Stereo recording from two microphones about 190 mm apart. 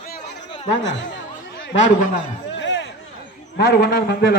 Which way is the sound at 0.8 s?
70° left (ahead or behind).